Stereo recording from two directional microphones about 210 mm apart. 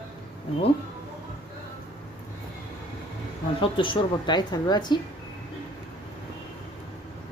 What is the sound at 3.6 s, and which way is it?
Speech, 25° left (ahead or behind).